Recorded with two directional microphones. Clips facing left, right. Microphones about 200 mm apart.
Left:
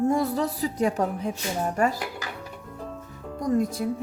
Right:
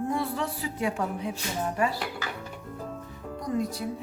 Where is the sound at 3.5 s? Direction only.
50° left (ahead or behind).